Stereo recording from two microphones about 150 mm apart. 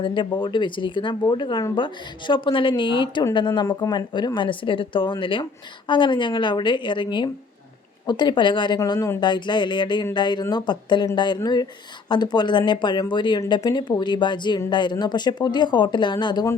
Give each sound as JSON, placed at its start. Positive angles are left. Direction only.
{"t": 0.0, "sound": "speech", "side_deg": 35}
{"t": 8.8, "sound": "speech", "side_deg": 20}